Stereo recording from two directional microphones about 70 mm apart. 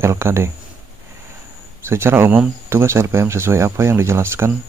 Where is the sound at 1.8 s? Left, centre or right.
Right.